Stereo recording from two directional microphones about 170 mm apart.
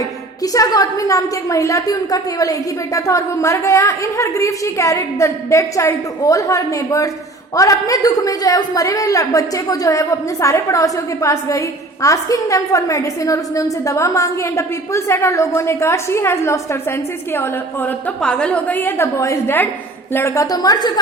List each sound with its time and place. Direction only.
0.4 s a woman's voice: 20° left (ahead or behind)